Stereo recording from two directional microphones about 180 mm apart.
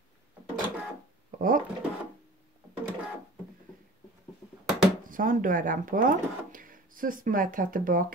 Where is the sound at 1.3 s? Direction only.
50° right (ahead or behind).